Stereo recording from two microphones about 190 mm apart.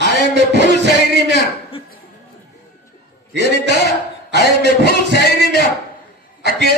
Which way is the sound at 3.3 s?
65° right (ahead or behind).